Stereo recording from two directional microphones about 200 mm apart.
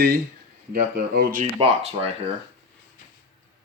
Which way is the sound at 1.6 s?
30° right (ahead or behind).